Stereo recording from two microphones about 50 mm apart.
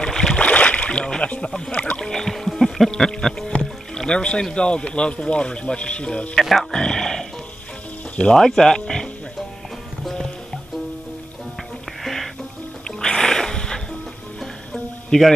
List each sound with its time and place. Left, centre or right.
0.0 s boat: centre
0.4 s boat: left
2.0 s music: centre
3.9 s speech: centre
6.4 s speech: centre
6.7 s speech: centre
10.0 s music: centre
12.0 s music: centre
12.8 s music: centre